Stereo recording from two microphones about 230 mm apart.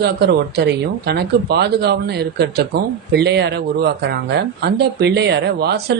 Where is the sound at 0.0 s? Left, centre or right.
Right.